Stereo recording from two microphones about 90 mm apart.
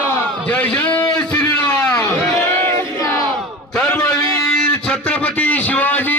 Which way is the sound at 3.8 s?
20° left (ahead or behind).